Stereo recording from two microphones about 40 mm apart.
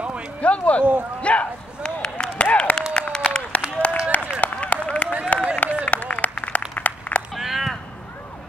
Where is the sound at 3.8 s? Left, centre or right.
Left.